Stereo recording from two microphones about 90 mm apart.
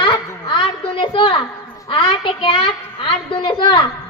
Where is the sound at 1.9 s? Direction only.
70° left (ahead or behind).